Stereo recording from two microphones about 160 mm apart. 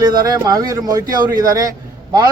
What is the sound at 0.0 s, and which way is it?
Speech, 25° right (ahead or behind).